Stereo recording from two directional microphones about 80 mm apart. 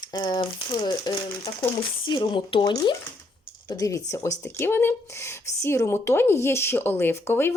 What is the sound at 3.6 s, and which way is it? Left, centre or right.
Speech, left.